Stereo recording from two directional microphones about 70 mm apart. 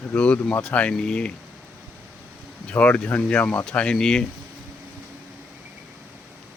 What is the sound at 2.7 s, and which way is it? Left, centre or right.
Speech, left.